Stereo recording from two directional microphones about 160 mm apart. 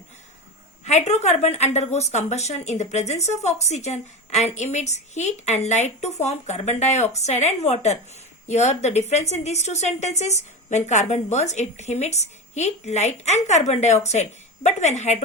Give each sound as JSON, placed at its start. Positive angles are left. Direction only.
{"t": 0.9, "sound": "a woman's voice", "side_deg": 45}